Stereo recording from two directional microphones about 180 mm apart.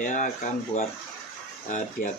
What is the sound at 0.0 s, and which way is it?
Speech, 45° left (ahead or behind).